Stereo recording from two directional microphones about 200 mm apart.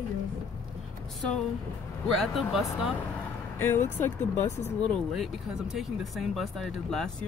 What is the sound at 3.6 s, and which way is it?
Speech, 10° left (ahead or behind).